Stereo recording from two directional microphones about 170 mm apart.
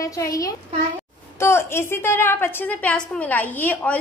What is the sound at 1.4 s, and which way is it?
A woman's voice, 15° left (ahead or behind).